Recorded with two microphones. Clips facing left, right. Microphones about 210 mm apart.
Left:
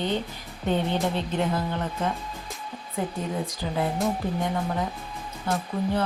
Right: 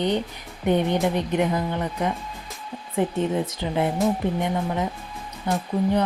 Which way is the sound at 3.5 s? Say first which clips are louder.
Right 3 dB; 25° right (ahead or behind).